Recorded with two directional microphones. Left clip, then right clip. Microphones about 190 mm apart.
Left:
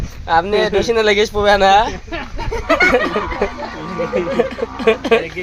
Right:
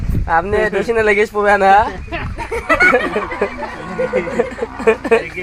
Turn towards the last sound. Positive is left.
turn(degrees=0)  # may be behind; listen again after turning